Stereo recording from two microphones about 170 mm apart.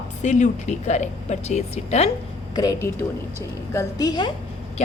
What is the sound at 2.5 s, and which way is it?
A woman's voice, 20° left (ahead or behind).